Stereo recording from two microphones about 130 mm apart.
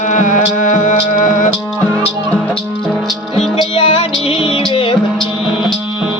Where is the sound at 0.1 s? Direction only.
75° left (ahead or behind).